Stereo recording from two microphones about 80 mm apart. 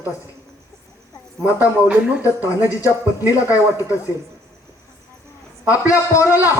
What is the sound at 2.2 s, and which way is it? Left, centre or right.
A man's voice, left.